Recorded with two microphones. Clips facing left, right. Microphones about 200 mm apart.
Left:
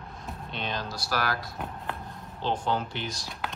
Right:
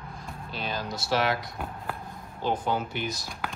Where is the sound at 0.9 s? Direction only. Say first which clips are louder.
Right 6 dB; 25° right (ahead or behind).